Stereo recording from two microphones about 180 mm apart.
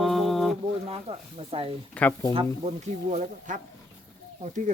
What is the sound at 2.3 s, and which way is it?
Speech, 35° right (ahead or behind).